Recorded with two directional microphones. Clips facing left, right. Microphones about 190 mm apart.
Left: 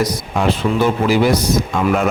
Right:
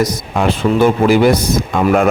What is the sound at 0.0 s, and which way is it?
A man's voice, 50° right (ahead or behind).